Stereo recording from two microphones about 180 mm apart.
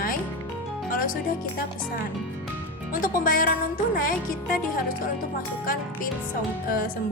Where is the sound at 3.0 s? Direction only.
50° left (ahead or behind).